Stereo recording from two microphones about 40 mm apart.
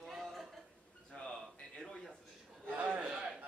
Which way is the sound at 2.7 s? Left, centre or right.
Right.